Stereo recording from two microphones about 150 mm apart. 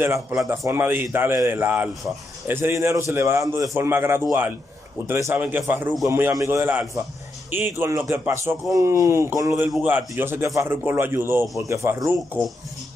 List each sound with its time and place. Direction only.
0.0 s a man's voice: 15° right (ahead or behind)